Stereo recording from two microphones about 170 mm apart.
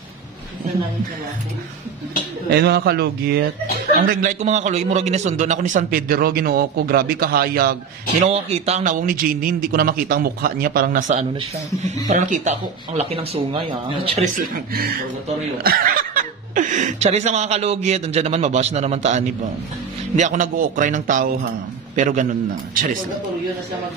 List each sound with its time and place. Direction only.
2.5 s speech: 75° right (ahead or behind)
4.0 s a man's voice: 55° right (ahead or behind)
8.3 s a man's voice: 35° right (ahead or behind)
14.3 s a man's voice: 60° right (ahead or behind)